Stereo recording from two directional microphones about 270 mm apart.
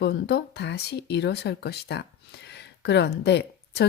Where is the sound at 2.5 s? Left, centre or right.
Left.